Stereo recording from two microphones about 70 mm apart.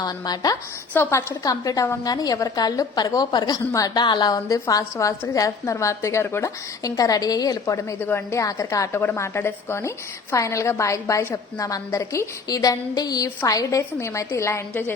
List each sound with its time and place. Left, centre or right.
0.0 s a woman's voice: left
0.9 s a woman's voice: left
1.5 s a woman's voice: left
3.7 s a woman's voice: left
4.4 s a woman's voice: left
6.4 s a woman's voice: left
7.9 s a woman's voice: left
8.3 s a woman's voice: left
8.9 s a woman's voice: left
9.1 s a woman's voice: left
10.3 s a woman's voice: left
11.6 s a woman's voice: left
14.7 s a woman's voice: left